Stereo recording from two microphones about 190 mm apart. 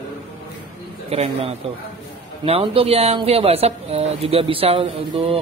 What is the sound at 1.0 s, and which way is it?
Speech, 30° right (ahead or behind).